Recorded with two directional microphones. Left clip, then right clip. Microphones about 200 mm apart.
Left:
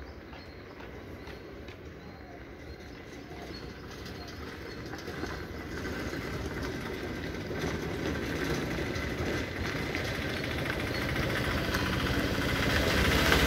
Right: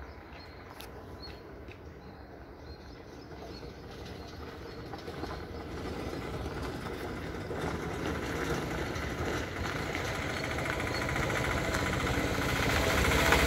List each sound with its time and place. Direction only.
4.9 s vehicle: 50° left (ahead or behind)